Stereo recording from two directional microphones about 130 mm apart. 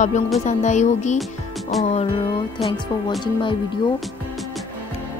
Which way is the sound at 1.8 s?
55° left (ahead or behind).